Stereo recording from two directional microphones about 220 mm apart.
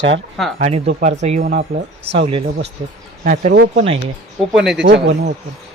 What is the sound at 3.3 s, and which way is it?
Speech, 40° right (ahead or behind).